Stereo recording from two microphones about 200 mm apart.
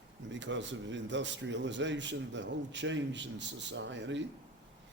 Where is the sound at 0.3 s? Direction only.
65° right (ahead or behind).